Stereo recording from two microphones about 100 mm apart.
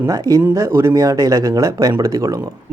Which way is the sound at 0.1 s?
35° right (ahead or behind).